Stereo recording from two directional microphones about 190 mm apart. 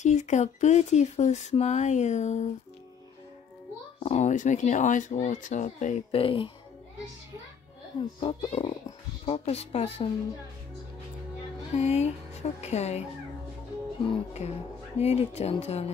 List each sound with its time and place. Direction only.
0.0 s speech: 40° left (ahead or behind)
4.0 s speech: 35° left (ahead or behind)
6.1 s speech: 30° left (ahead or behind)
8.2 s speech: 30° left (ahead or behind)
11.7 s speech: 35° left (ahead or behind)
14.0 s speech: 30° left (ahead or behind)